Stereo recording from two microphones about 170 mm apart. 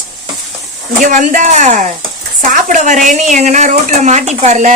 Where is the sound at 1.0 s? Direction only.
50° right (ahead or behind).